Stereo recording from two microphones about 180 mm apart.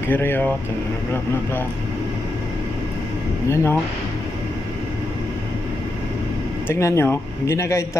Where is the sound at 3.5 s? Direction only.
15° left (ahead or behind).